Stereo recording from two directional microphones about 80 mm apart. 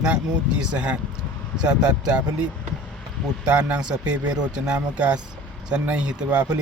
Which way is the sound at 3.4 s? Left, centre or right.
Centre.